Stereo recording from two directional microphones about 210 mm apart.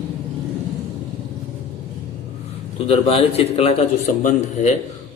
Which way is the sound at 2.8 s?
30° left (ahead or behind).